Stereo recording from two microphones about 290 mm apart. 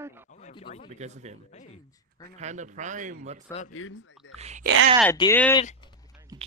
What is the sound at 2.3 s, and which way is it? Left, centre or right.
A man's voice, right.